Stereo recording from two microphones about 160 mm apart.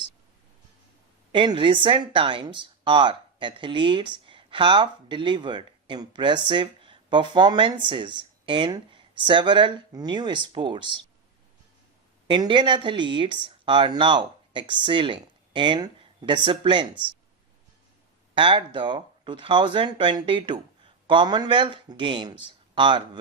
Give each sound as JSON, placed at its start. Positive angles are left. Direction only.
{"t": 1.3, "sound": "speech", "side_deg": -30}
{"t": 12.3, "sound": "speech", "side_deg": -30}
{"t": 18.3, "sound": "speech", "side_deg": -30}